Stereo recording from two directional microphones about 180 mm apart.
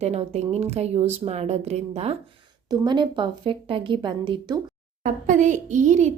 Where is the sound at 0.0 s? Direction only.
35° right (ahead or behind).